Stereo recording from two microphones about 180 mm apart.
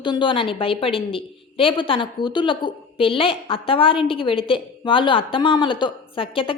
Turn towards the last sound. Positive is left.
turn(degrees=30)  # may be behind; listen again after turning